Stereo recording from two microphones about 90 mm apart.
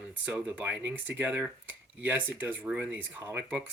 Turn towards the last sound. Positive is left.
turn(degrees=-20)  # may be behind; listen again after turning